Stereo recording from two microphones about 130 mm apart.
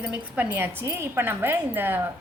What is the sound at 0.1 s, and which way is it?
A woman's voice, 10° right (ahead or behind).